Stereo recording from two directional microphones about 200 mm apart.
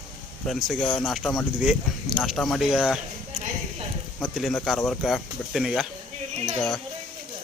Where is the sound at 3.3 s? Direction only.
35° right (ahead or behind).